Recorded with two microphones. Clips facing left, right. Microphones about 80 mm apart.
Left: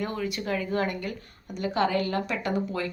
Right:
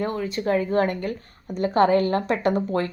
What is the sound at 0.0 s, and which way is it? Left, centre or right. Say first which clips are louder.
A woman's voice: right 5 dB; right.